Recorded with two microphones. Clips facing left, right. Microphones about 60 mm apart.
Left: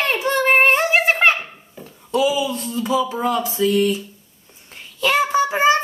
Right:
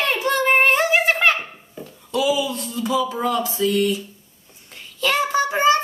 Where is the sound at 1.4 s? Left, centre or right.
Centre.